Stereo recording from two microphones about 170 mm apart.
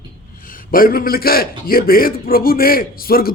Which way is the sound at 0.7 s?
55° left (ahead or behind).